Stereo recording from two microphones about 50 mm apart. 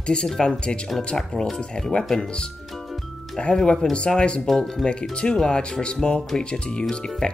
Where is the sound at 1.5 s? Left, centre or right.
Centre.